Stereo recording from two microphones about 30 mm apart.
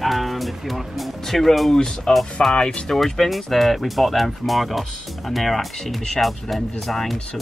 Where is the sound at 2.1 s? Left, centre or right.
Left.